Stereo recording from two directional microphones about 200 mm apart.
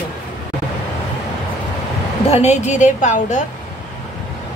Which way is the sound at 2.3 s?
35° left (ahead or behind).